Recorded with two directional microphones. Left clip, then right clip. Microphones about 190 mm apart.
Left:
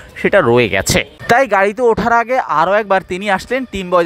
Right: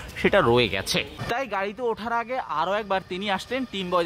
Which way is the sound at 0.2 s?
25° left (ahead or behind).